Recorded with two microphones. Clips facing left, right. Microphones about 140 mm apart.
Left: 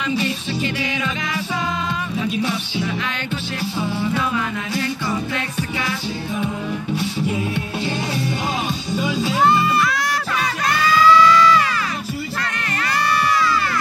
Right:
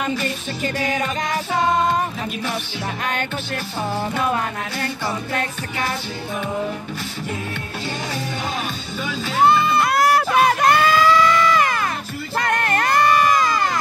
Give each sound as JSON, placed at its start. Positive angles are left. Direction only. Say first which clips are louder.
{"t": 0.2, "sound": "music", "louder": "left 2 dB", "side_deg": -45}
{"t": 4.0, "sound": "music", "louder": "right 1 dB", "side_deg": -50}
{"t": 9.0, "sound": "music", "louder": "left 4 dB", "side_deg": 15}
{"t": 9.8, "sound": "music", "louder": "right 6 dB", "side_deg": -60}
{"t": 12.4, "sound": "crowd", "louder": "right 6 dB", "side_deg": -55}